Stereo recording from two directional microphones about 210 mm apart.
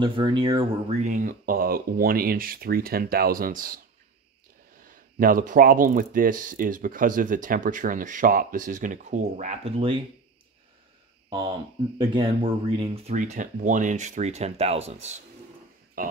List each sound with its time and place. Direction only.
0.0 s speech: 20° right (ahead or behind); by 3.8 s 40° right (ahead or behind)
4.8 s speech: 40° right (ahead or behind)
11.2 s speech: 20° right (ahead or behind)
16.0 s speech: 45° right (ahead or behind)